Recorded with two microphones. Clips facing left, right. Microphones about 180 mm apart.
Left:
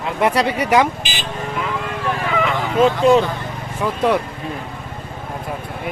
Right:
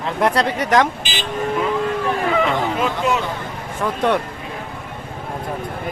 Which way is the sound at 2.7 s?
30° left (ahead or behind).